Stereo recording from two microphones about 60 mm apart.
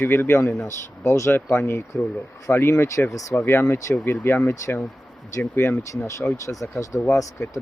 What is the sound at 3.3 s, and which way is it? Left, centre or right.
Speech, left.